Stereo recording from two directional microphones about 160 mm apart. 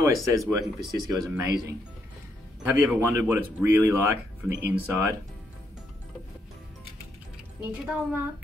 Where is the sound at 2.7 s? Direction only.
10° right (ahead or behind).